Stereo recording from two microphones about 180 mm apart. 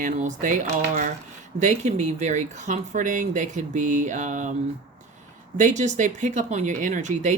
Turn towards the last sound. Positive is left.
turn(degrees=-40)  # may be behind; listen again after turning